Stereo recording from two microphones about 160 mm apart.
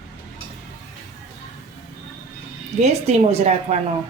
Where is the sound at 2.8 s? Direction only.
40° right (ahead or behind).